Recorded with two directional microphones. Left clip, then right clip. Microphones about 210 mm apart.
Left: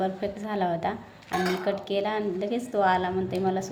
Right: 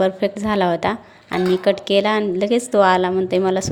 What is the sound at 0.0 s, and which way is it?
A woman's voice, 50° right (ahead or behind).